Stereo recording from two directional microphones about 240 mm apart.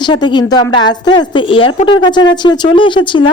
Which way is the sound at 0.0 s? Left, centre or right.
Centre.